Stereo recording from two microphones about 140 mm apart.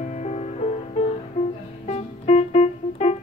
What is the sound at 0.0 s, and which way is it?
Music, 55° left (ahead or behind).